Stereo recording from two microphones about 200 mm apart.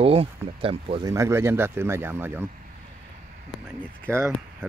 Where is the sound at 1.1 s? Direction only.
15° right (ahead or behind).